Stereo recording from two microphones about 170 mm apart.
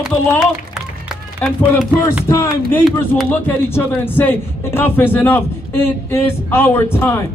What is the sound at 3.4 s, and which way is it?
Speech, 10° left (ahead or behind).